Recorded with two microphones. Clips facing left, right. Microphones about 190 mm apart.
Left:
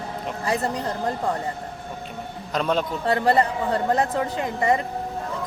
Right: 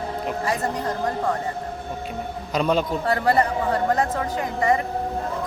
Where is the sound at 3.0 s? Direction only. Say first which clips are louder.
Left 3 dB; 25° left (ahead or behind).